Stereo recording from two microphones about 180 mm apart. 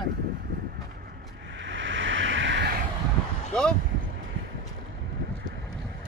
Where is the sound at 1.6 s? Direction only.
90° right.